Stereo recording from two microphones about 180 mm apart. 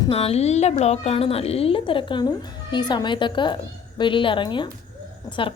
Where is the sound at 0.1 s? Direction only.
35° left (ahead or behind).